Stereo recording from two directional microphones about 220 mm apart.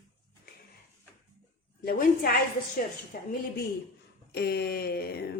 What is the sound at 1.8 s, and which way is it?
Speech, 40° left (ahead or behind).